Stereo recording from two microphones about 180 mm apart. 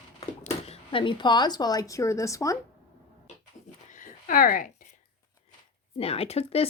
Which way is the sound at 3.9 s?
45° left (ahead or behind).